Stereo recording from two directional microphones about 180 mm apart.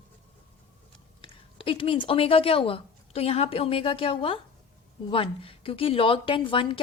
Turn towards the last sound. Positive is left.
turn(degrees=30)  # may be behind; listen again after turning